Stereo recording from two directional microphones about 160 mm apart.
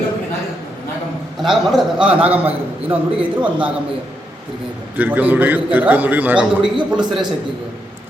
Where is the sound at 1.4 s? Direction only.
Centre (ahead or behind).